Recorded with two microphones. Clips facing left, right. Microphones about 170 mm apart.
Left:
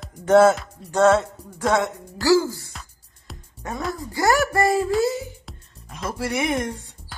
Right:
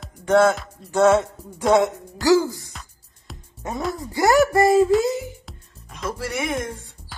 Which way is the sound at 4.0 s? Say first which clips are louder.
Right 4 dB; 20° right (ahead or behind).